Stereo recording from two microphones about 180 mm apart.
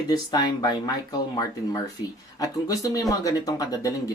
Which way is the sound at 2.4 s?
20° left (ahead or behind).